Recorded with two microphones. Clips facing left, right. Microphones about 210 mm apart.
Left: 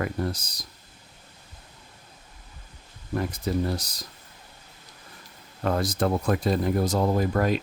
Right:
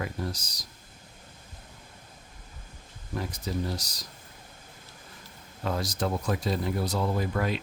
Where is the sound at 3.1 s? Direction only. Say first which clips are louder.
Left 6 dB; 55° left (ahead or behind).